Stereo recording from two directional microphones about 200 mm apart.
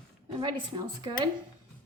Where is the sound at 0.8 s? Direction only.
25° right (ahead or behind).